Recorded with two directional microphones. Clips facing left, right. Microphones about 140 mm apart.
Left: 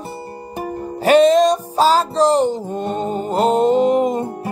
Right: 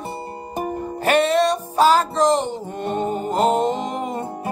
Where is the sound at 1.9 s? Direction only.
35° left (ahead or behind).